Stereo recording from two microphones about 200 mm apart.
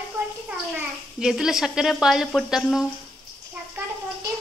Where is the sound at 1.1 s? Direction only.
5° right (ahead or behind).